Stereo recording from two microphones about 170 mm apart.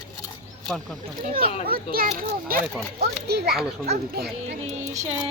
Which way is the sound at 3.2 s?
70° right (ahead or behind).